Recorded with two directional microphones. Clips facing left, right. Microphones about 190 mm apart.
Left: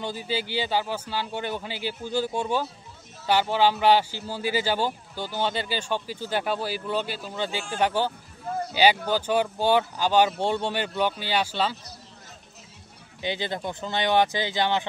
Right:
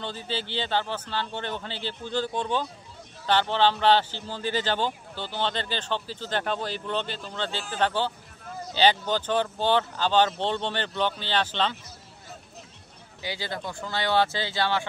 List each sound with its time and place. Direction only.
0.0 s speech: 10° left (ahead or behind)
13.2 s speech: 20° left (ahead or behind)